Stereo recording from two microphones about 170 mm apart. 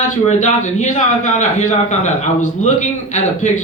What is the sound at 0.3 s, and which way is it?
A man's voice, 45° left (ahead or behind).